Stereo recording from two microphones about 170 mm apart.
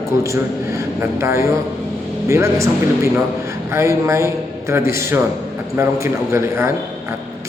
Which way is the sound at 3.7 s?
15° right (ahead or behind).